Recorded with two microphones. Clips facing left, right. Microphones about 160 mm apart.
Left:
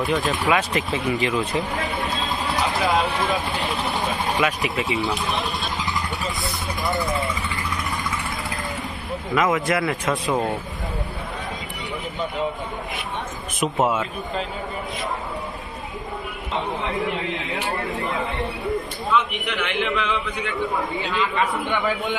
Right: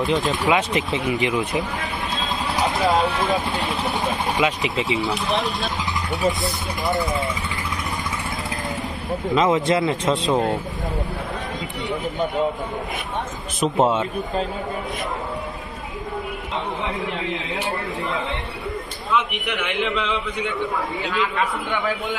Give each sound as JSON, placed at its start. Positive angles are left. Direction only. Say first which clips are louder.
{"t": 0.0, "sound": "speech", "louder": "right 1 dB", "side_deg": -20}
{"t": 2.7, "sound": "a man's voice", "louder": "right 3 dB", "side_deg": 0}
{"t": 4.4, "sound": "speech", "louder": "right 1 dB", "side_deg": -20}
{"t": 9.3, "sound": "speech", "louder": "right 2 dB", "side_deg": -25}
{"t": 13.7, "sound": "speech", "louder": "right 3 dB", "side_deg": -25}
{"t": 19.1, "sound": "speech", "louder": "even", "side_deg": -20}
{"t": 20.6, "sound": "a man's voice", "louder": "even", "side_deg": 0}